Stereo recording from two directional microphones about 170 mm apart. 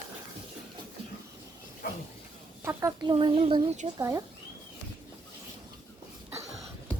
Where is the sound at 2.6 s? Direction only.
15° right (ahead or behind).